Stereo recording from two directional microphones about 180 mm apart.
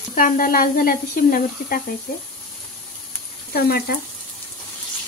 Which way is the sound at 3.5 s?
55° left (ahead or behind).